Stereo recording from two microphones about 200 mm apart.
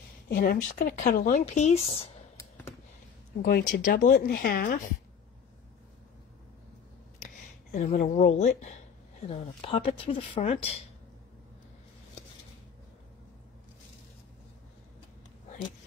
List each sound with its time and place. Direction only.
0.3 s speech: 45° left (ahead or behind)
3.4 s speech: 45° left (ahead or behind)
7.7 s speech: 35° left (ahead or behind)